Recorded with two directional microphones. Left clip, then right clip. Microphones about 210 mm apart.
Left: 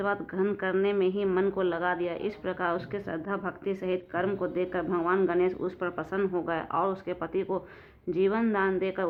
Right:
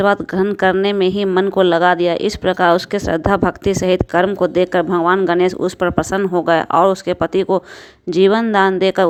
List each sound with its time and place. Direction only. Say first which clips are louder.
0.0 s speech: right 14 dB; 40° right (ahead or behind)